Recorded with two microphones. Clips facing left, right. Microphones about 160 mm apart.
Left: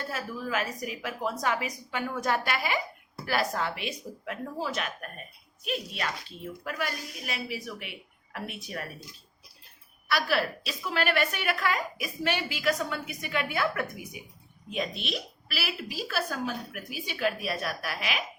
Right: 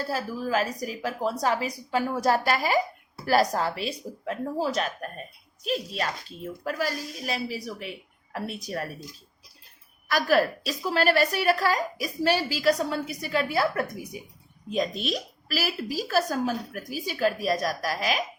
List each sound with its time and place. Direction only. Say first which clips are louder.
0.1 s a woman's voice: right 6 dB; 35° right (ahead or behind)
10.1 s a woman's voice: right 5 dB; 45° right (ahead or behind)